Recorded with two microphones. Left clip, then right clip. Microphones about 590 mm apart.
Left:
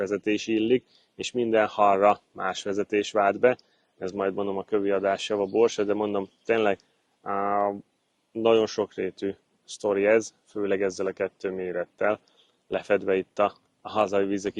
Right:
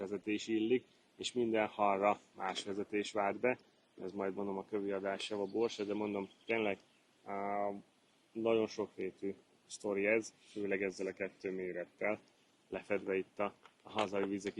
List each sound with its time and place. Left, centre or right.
0.0 s speech: left
7.3 s speech: left
8.4 s speech: left